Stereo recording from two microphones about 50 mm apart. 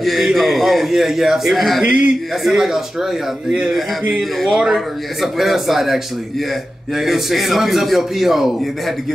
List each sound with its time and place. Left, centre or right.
0.0 s a man's voice: centre
1.9 s speech: right
2.4 s speech: centre
4.2 s a man's voice: centre
7.0 s a man's voice: centre